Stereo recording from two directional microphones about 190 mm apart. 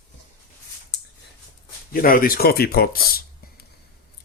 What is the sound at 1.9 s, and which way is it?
Speech, 50° left (ahead or behind).